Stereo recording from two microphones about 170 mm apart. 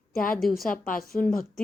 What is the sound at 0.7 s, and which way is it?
Speech, 55° left (ahead or behind).